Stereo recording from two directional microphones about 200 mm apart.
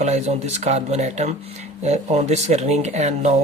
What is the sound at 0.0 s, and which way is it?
Speech, 35° right (ahead or behind).